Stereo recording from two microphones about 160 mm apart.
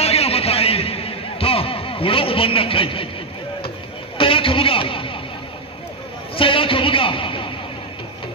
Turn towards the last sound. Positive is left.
turn(degrees=35)  # may be behind; listen again after turning